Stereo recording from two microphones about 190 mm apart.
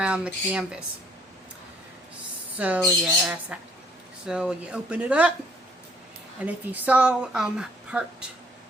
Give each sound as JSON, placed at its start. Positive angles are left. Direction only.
{"t": 0.0, "sound": "a woman's voice", "side_deg": -5}
{"t": 2.6, "sound": "a woman's voice", "side_deg": -5}
{"t": 6.4, "sound": "a woman's voice", "side_deg": -5}